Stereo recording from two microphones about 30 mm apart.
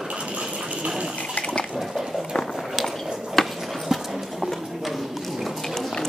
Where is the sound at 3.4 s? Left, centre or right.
Centre.